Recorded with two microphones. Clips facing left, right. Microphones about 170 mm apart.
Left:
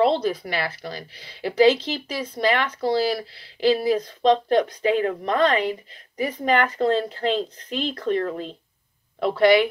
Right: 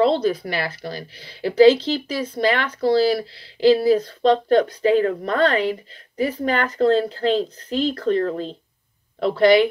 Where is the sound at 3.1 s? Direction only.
30° right (ahead or behind).